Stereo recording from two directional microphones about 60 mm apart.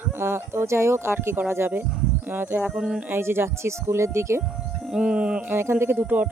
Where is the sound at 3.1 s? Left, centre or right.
Right.